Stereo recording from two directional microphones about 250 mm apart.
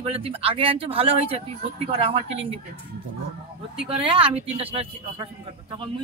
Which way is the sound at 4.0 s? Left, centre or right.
Right.